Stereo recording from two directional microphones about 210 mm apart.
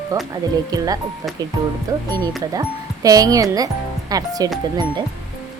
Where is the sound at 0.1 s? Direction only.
15° right (ahead or behind).